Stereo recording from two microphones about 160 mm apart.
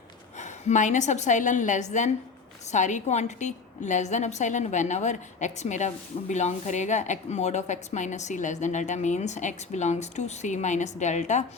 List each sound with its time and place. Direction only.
0.3 s a woman's voice: 50° left (ahead or behind)